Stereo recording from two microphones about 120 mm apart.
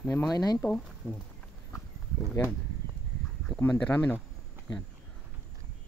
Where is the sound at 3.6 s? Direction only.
15° left (ahead or behind).